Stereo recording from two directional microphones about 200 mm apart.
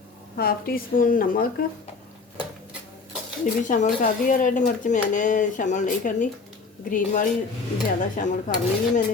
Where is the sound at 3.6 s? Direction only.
40° left (ahead or behind).